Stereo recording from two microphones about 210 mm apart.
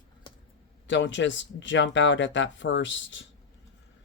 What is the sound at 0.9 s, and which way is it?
Speech, 60° left (ahead or behind).